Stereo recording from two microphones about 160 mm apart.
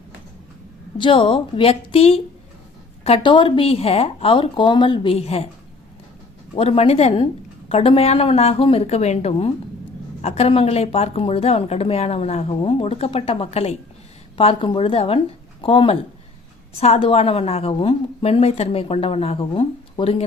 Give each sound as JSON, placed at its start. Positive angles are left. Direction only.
{"t": 0.9, "sound": "a woman's voice", "side_deg": 30}
{"t": 6.5, "sound": "a woman's voice", "side_deg": 35}